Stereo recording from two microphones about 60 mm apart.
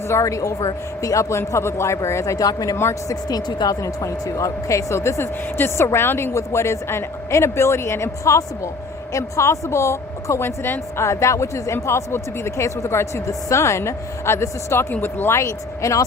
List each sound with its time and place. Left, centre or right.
0.1 s a man's voice: left
1.4 s a man's voice: left
15.4 s a man's voice: left